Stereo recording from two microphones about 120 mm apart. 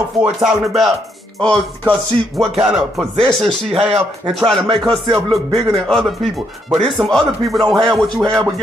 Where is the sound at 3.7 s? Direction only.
55° right (ahead or behind).